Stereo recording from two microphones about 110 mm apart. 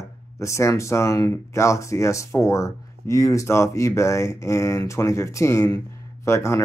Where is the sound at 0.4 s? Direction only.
25° left (ahead or behind).